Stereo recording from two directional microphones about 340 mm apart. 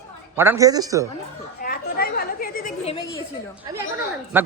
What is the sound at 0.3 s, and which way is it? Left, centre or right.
Speech, centre.